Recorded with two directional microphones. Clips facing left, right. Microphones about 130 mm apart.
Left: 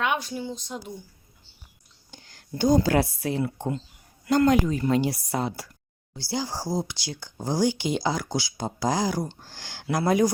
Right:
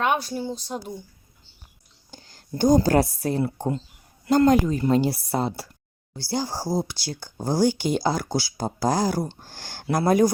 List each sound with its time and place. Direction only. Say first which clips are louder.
0.0 s speech: right 3 dB; 40° right (ahead or behind)
2.0 s speech: right 3 dB; 35° right (ahead or behind)
6.2 s speech: right 2 dB; 45° right (ahead or behind)
7.6 s speech: right 3 dB; 45° right (ahead or behind)
9.5 s speech: right 2 dB; 45° right (ahead or behind)